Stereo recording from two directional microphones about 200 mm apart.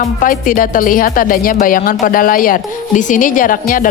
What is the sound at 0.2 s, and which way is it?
Music, 45° left (ahead or behind).